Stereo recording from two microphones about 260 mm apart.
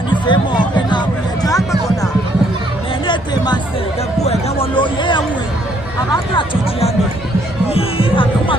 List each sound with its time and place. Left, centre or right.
0.1 s music: centre
3.1 s chatter: centre
4.2 s a sound: left
6.3 s music: left